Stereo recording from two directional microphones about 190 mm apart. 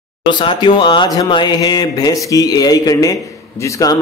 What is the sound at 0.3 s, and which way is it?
A man's voice, 25° left (ahead or behind).